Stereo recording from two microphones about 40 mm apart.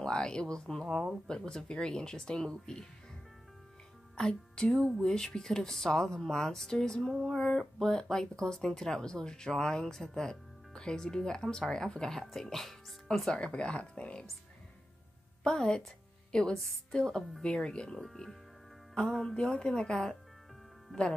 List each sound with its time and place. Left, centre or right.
0.0 s speech: centre
4.2 s speech: left
7.1 s a sound: centre
7.4 s speech: centre
13.3 s speech: left
15.4 s a woman's voice: centre